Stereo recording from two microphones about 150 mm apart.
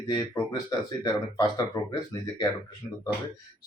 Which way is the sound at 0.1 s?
25° left (ahead or behind).